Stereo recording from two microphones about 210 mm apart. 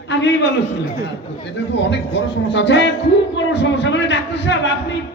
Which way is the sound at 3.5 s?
55° left (ahead or behind).